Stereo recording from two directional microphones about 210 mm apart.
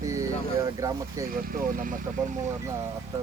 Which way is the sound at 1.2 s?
40° right (ahead or behind).